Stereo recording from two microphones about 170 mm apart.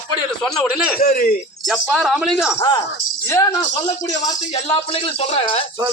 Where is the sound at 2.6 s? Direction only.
25° left (ahead or behind).